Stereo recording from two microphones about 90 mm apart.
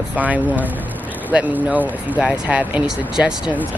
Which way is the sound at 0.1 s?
15° right (ahead or behind).